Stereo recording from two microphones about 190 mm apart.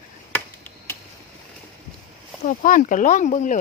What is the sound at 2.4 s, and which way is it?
Speech, 45° left (ahead or behind).